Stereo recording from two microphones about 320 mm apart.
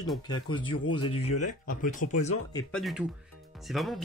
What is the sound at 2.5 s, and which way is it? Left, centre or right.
Speech, centre.